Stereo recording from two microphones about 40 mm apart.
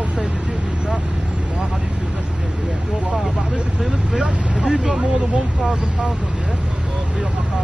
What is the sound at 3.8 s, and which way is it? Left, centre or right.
Vehicle, centre.